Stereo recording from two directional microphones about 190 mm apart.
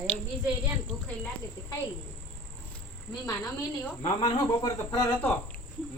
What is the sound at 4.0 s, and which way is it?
Speech, 25° left (ahead or behind).